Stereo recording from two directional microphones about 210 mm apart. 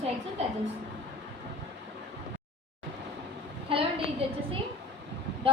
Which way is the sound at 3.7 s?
25° right (ahead or behind).